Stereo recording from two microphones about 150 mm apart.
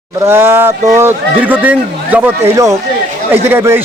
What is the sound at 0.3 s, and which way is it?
Speech, 15° right (ahead or behind).